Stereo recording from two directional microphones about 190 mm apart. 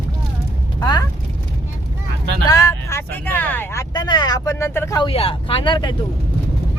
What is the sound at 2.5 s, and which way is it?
Speech, 15° left (ahead or behind).